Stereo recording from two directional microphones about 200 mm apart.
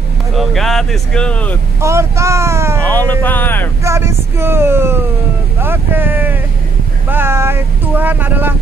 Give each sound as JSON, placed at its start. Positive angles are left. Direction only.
{"t": 0.4, "sound": "speech", "side_deg": 0}
{"t": 1.8, "sound": "speech", "side_deg": -15}
{"t": 2.9, "sound": "speech", "side_deg": 10}
{"t": 3.8, "sound": "speech", "side_deg": -15}